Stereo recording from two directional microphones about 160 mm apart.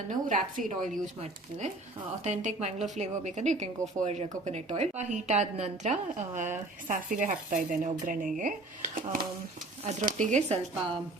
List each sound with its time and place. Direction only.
0.1 s a woman's voice: 55° right (ahead or behind)